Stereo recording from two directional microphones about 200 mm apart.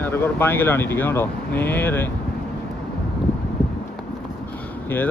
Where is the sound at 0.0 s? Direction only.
10° left (ahead or behind).